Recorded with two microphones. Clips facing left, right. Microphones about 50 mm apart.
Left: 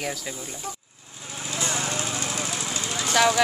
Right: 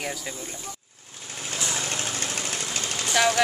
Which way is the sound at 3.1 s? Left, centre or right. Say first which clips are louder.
Left 2 dB; centre.